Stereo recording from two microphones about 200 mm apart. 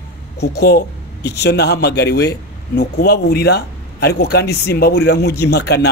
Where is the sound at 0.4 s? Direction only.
55° left (ahead or behind).